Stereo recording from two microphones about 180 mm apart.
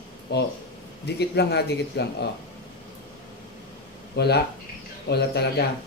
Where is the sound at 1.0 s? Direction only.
65° left (ahead or behind).